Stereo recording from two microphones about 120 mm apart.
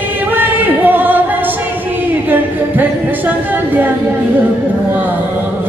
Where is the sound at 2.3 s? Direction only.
15° right (ahead or behind).